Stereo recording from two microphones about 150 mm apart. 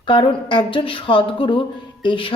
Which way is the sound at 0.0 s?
35° left (ahead or behind).